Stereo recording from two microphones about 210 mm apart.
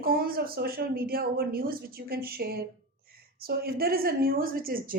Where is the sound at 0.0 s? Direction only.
45° right (ahead or behind).